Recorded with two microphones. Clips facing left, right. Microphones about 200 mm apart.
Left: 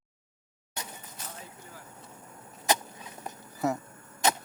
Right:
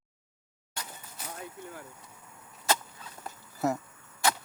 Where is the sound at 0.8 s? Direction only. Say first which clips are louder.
Left 1 dB; 20° left (ahead or behind).